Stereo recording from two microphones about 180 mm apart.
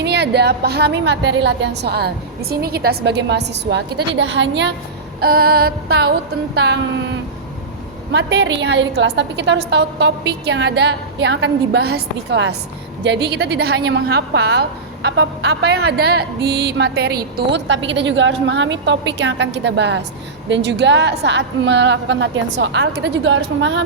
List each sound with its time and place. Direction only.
0.0 s speech: 65° right (ahead or behind)
5.2 s a sound: 55° right (ahead or behind)
8.1 s a woman's voice: 75° right (ahead or behind)